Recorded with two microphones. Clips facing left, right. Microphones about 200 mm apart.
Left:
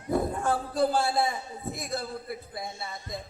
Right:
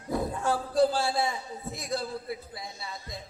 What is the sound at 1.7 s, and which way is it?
A man's voice, 55° left (ahead or behind).